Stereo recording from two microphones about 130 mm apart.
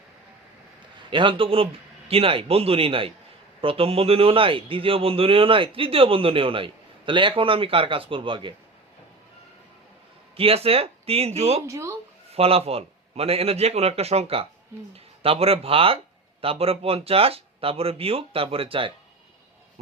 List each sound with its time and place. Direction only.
1.1 s a man's voice: 40° right (ahead or behind)
10.3 s a man's voice: 45° right (ahead or behind)
11.6 s speech: 20° right (ahead or behind)
12.3 s a man's voice: 50° right (ahead or behind)